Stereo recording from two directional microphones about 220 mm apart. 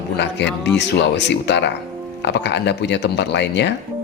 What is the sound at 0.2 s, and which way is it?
Speech, 50° left (ahead or behind).